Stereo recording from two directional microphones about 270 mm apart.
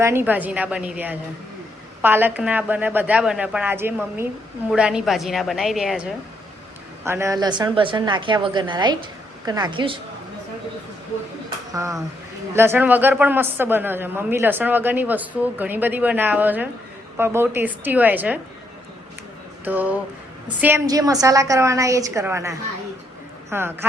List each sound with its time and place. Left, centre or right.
0.0 s a woman's voice: centre
11.7 s a woman's voice: centre
19.6 s a woman's voice: centre